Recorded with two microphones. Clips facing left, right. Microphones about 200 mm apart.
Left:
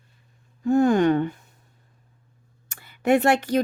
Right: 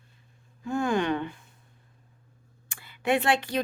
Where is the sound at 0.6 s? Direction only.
40° left (ahead or behind).